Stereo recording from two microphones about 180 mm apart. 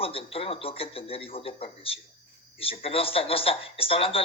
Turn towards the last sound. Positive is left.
turn(degrees=30)  # may be behind; listen again after turning